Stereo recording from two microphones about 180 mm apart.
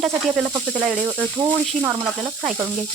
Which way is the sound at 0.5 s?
25° right (ahead or behind).